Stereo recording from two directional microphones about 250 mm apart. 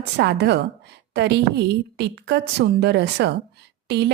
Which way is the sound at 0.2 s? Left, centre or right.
Right.